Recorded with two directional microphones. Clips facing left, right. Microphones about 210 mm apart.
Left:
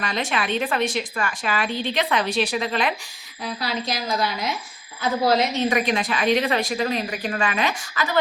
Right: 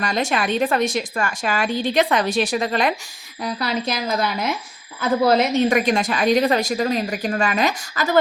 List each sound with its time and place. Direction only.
0.0 s a woman's voice: 45° right (ahead or behind)